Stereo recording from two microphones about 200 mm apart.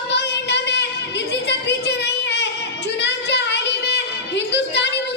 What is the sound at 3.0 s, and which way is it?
Child singing, 60° left (ahead or behind).